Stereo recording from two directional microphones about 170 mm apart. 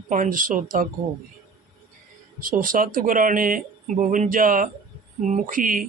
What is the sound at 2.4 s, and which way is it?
Speech, 55° right (ahead or behind).